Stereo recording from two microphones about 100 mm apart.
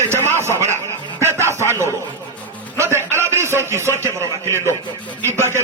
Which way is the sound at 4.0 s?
30° right (ahead or behind).